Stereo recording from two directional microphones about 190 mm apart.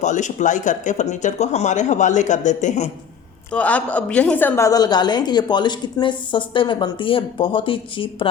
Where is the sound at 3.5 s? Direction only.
5° left (ahead or behind).